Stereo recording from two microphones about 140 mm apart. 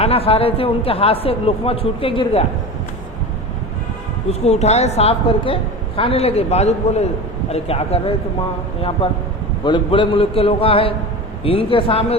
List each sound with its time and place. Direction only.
0.0 s speech: 45° left (ahead or behind)
4.3 s speech: 50° left (ahead or behind)
9.6 s a man's voice: 35° left (ahead or behind)